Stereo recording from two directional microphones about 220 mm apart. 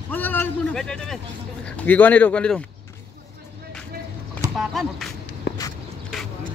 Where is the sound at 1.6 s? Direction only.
5° left (ahead or behind).